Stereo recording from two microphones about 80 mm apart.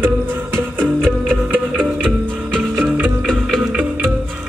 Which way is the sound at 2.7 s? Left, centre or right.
Centre.